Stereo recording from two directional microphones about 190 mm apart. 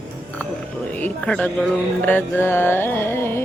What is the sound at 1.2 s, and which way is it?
Carnatic music, 5° left (ahead or behind).